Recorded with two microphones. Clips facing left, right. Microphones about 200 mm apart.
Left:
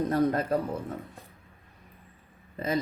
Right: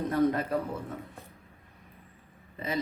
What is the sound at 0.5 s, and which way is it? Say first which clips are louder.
Speech: left 3 dB; 40° left (ahead or behind).